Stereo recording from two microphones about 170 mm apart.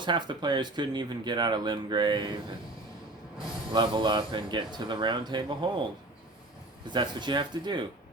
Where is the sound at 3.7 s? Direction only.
25° right (ahead or behind).